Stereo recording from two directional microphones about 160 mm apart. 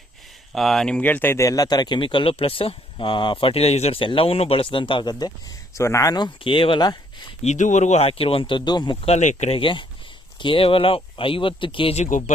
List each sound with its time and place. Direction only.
0.5 s a man's voice: centre (ahead or behind); by 7.3 s 25° left (ahead or behind)
7.4 s a man's voice: 50° left (ahead or behind); by 9.0 s 25° left (ahead or behind)
9.0 s a man's voice: 45° left (ahead or behind)
12.0 s speech: 55° left (ahead or behind)